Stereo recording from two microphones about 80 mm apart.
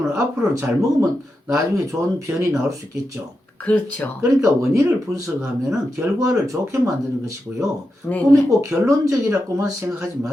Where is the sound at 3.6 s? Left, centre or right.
Centre.